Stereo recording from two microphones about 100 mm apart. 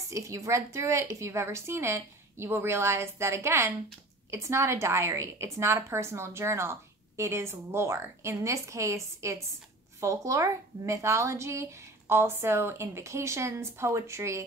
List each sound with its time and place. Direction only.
0.1 s a woman's voice: 30° right (ahead or behind)